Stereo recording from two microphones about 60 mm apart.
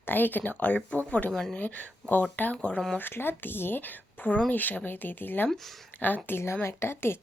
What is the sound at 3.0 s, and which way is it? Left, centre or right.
Speech, left.